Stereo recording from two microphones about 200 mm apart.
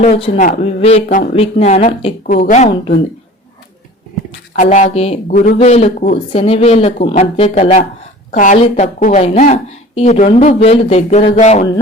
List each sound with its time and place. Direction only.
0.0 s a woman's voice: 35° left (ahead or behind)
4.5 s a woman's voice: 40° left (ahead or behind)
5.3 s speech: 45° left (ahead or behind)
5.5 s a woman's voice: 30° left (ahead or behind)